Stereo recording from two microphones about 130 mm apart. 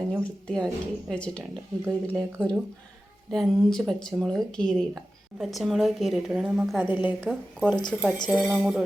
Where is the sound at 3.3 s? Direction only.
Centre (ahead or behind).